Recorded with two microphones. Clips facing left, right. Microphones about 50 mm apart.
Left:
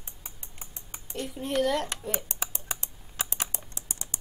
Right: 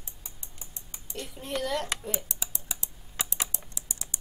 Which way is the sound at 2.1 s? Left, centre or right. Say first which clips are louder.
Left 2 dB; left.